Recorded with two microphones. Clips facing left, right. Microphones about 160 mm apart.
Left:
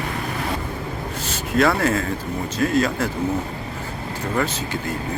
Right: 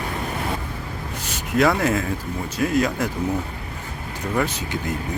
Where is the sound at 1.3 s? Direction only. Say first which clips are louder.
Even; 15° right (ahead or behind).